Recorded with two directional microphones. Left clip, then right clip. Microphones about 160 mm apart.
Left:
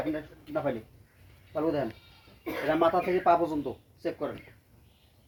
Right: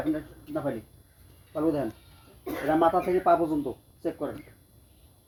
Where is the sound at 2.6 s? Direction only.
15° right (ahead or behind).